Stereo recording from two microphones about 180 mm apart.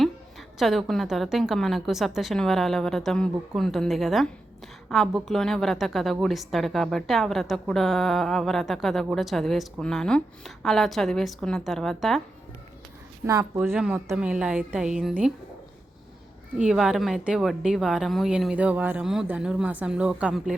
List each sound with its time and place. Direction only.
0.0 s a woman's voice: centre (ahead or behind)
13.2 s speech: 15° right (ahead or behind)
13.6 s a woman's voice: 5° right (ahead or behind)
16.6 s a woman's voice: centre (ahead or behind)